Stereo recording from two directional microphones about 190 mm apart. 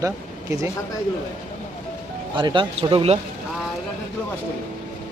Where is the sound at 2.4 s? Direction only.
25° right (ahead or behind).